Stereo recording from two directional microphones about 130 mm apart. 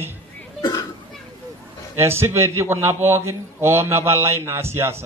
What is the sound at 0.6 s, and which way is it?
Cough, 30° left (ahead or behind).